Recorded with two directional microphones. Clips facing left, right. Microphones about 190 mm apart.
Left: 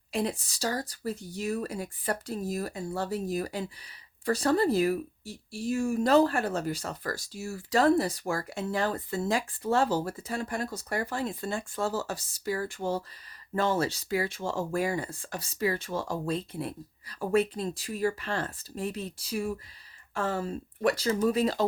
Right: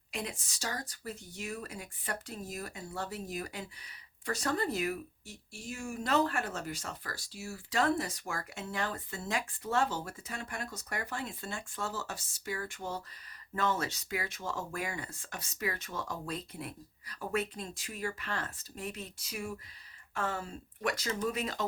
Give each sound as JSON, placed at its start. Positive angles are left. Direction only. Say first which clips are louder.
{"t": 0.1, "sound": "speech", "louder": "left 10 dB", "side_deg": 35}